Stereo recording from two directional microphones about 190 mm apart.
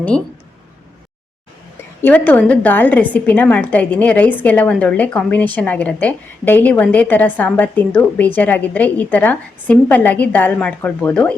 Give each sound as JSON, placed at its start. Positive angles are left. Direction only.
{"t": 2.0, "sound": "a woman's voice", "side_deg": 10}